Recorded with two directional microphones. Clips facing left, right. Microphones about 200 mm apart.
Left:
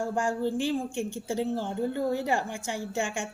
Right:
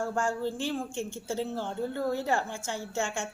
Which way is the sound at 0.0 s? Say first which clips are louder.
Left 2 dB; 15° left (ahead or behind).